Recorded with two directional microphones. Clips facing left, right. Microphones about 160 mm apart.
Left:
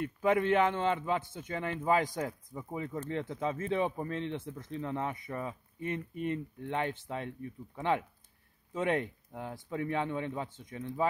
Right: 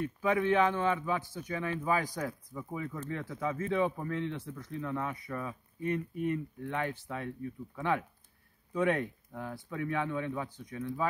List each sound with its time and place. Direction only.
0.2 s a man's voice: 20° left (ahead or behind)